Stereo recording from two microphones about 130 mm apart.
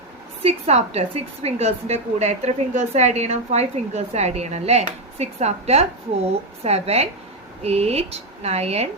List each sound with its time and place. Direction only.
0.4 s a woman's voice: 55° right (ahead or behind)